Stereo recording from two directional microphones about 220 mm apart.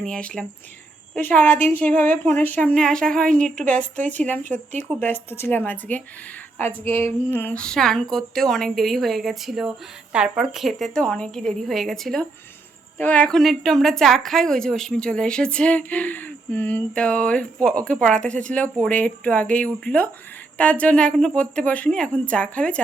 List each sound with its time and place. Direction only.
0.0 s a woman's voice: 5° left (ahead or behind)
4.4 s speech: 35° right (ahead or behind)
4.9 s a woman's voice: 10° left (ahead or behind)